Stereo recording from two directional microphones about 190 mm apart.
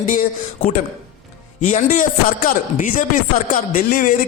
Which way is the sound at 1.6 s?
40° left (ahead or behind).